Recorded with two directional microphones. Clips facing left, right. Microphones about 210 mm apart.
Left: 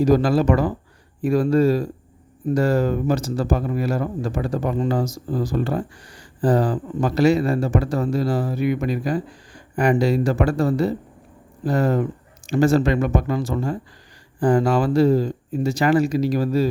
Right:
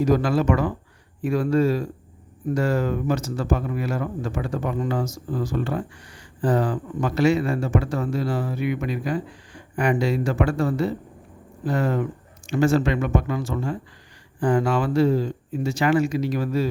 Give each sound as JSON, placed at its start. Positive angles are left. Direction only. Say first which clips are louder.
{"t": 0.0, "sound": "speech", "louder": "left 3 dB", "side_deg": 35}